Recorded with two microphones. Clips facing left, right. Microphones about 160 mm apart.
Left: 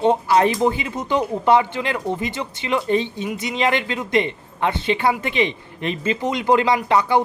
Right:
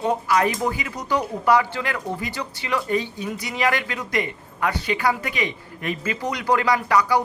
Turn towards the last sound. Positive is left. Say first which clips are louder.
# left 2 dB
turn(degrees=25)  # may be behind; listen again after turning